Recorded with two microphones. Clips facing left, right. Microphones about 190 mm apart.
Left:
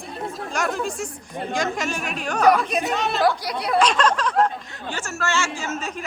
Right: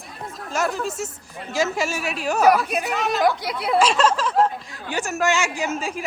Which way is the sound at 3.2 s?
25° right (ahead or behind).